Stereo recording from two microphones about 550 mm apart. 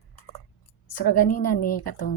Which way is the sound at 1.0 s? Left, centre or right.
Left.